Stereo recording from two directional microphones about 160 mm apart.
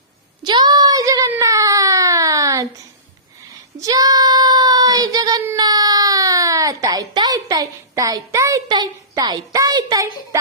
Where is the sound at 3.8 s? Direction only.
25° right (ahead or behind).